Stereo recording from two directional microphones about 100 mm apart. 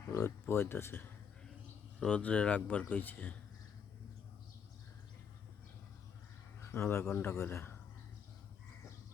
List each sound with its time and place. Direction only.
0.1 s speech: 25° left (ahead or behind)
2.0 s speech: 10° left (ahead or behind)
6.6 s speech: 25° left (ahead or behind)